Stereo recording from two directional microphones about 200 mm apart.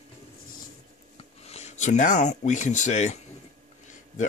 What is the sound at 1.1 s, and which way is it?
Speech, 30° left (ahead or behind).